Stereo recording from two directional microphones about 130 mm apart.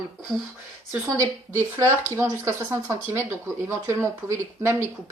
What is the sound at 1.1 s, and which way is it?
A woman's voice, 25° right (ahead or behind).